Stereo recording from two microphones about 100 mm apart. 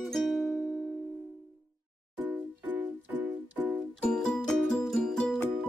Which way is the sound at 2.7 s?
15° right (ahead or behind).